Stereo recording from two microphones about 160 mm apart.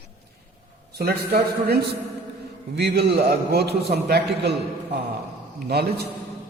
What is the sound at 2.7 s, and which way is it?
A man's voice, 90° right.